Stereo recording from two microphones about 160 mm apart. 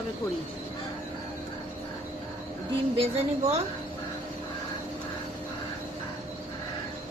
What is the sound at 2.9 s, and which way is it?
Speech, 40° right (ahead or behind).